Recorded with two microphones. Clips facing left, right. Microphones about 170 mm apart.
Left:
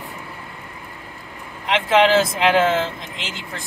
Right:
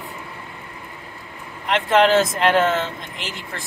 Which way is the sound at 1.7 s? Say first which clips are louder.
Even; 5° left (ahead or behind).